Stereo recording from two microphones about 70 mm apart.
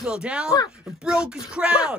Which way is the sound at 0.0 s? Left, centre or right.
Centre.